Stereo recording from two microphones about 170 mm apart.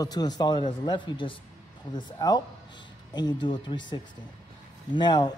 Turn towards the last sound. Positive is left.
turn(degrees=25)  # may be behind; listen again after turning